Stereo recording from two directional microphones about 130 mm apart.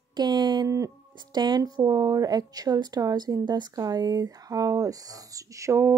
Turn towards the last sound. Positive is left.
turn(degrees=-20)  # may be behind; listen again after turning